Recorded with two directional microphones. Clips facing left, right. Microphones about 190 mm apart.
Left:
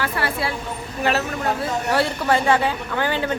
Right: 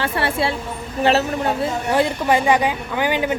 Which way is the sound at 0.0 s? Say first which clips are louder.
Right 3 dB; 25° right (ahead or behind).